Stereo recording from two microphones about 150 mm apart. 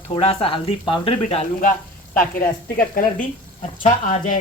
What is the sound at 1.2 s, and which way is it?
Speech, 50° left (ahead or behind).